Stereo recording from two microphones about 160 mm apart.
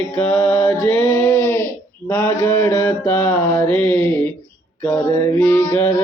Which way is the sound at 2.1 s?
15° left (ahead or behind).